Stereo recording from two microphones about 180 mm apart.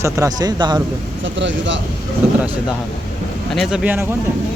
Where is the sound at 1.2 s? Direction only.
90° right.